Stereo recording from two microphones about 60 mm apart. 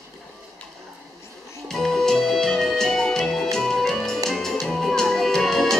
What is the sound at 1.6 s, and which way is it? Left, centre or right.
Music, centre.